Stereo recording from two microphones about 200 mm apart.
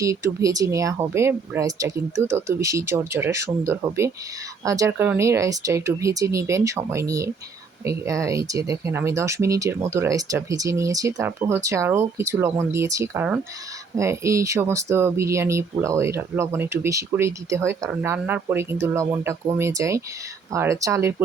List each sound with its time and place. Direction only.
0.0 s speech: 15° right (ahead or behind)